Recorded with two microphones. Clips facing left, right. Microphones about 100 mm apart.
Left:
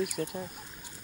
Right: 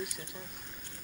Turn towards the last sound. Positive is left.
turn(degrees=55)  # may be behind; listen again after turning